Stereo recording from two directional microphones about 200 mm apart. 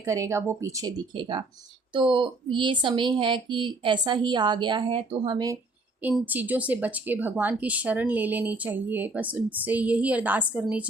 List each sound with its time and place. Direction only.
0.0 s speech: 15° right (ahead or behind)
6.0 s speech: 10° right (ahead or behind)